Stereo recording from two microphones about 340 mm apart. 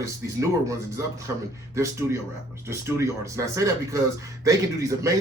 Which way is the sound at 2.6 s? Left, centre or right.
Centre.